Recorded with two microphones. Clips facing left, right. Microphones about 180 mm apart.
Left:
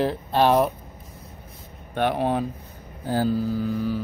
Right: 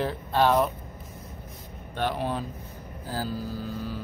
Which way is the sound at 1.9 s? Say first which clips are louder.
Left 6 dB; 55° left (ahead or behind).